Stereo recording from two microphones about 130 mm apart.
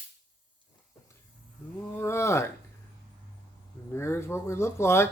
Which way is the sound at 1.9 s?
20° left (ahead or behind).